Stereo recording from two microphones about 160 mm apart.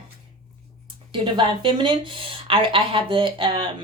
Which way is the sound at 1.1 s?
30° right (ahead or behind).